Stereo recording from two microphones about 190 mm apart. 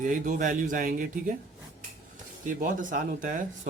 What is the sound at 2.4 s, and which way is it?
Speech, 45° right (ahead or behind).